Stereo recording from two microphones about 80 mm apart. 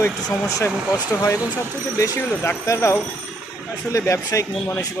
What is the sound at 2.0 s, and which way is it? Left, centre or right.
Speech, left.